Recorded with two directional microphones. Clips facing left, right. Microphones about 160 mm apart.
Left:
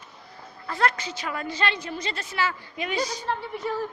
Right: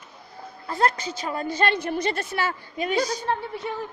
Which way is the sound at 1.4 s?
50° right (ahead or behind).